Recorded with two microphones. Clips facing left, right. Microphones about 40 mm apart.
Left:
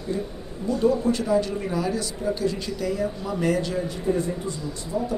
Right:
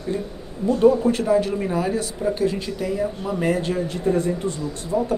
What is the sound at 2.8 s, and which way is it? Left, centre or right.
Speech, centre.